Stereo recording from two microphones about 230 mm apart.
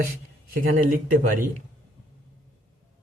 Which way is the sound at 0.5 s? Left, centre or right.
Right.